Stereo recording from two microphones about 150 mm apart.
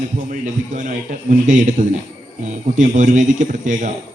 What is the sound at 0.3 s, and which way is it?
Speech, 60° right (ahead or behind).